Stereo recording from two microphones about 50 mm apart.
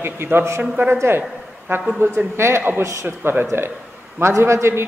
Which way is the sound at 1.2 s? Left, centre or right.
Right.